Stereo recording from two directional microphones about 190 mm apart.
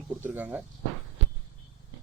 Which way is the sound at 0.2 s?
10° right (ahead or behind).